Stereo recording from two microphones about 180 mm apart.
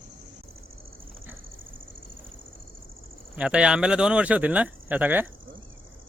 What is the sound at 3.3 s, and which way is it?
Speech, 5° right (ahead or behind).